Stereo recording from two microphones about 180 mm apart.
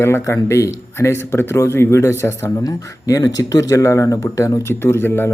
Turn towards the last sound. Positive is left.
turn(degrees=15)  # may be behind; listen again after turning